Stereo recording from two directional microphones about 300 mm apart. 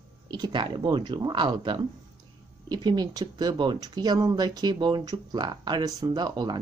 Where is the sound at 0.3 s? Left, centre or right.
Centre.